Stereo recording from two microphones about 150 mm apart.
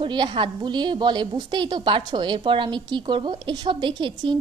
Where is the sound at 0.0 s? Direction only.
35° right (ahead or behind).